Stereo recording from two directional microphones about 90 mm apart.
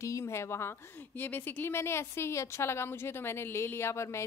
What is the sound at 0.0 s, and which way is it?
A woman's voice, 35° left (ahead or behind).